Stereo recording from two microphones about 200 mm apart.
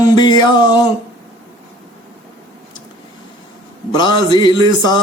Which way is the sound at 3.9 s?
20° left (ahead or behind).